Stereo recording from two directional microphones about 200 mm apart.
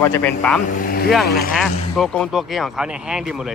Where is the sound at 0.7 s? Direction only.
45° left (ahead or behind).